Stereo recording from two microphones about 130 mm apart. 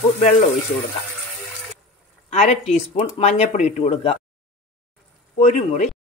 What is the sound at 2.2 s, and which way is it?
Speech, 60° left (ahead or behind).